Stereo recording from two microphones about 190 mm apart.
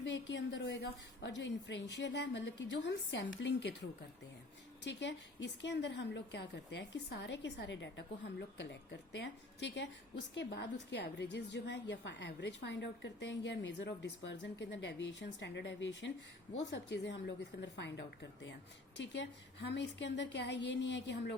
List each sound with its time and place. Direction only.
0.0 s a woman's voice: 70° left (ahead or behind)
4.8 s a woman's voice: 65° left (ahead or behind)